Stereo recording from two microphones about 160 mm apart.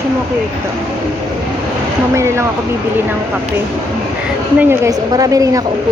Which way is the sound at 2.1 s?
20° right (ahead or behind).